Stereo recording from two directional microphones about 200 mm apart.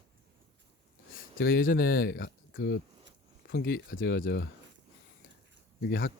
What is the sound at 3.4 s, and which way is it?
Speech, 50° left (ahead or behind).